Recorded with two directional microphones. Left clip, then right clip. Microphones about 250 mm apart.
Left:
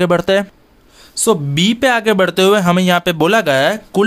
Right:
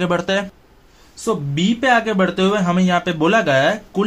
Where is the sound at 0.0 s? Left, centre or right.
Left.